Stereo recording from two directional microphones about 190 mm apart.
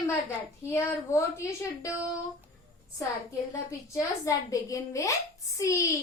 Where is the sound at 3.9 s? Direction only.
15° left (ahead or behind).